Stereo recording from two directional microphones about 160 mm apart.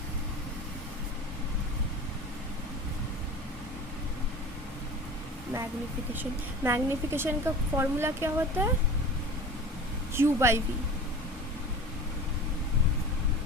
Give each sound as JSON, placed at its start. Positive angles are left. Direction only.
{"t": 6.7, "sound": "speech", "side_deg": -15}
{"t": 10.2, "sound": "speech", "side_deg": -15}